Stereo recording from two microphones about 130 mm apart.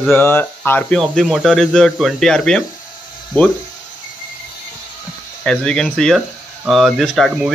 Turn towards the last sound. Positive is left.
turn(degrees=0)  # may be behind; listen again after turning